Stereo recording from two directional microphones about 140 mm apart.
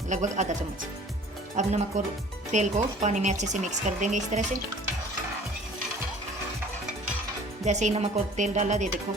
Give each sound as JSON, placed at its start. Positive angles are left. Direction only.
{"t": 0.1, "sound": "speech", "side_deg": -60}
{"t": 1.6, "sound": "speech", "side_deg": -55}
{"t": 7.6, "sound": "speech", "side_deg": -55}